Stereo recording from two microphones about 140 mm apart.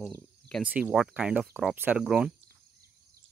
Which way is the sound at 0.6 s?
10° right (ahead or behind).